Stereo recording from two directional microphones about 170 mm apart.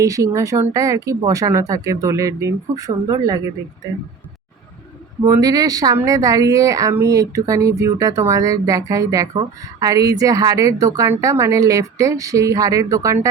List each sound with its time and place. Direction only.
0.0 s speech: 20° right (ahead or behind)
5.2 s speech: 20° right (ahead or behind)